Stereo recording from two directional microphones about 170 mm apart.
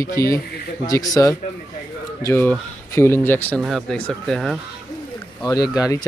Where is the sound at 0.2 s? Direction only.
15° left (ahead or behind); by 4.6 s centre (ahead or behind).